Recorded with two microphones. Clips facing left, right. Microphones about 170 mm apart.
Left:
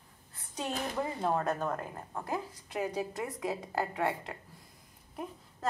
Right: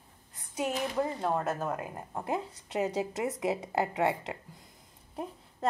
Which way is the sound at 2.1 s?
25° right (ahead or behind).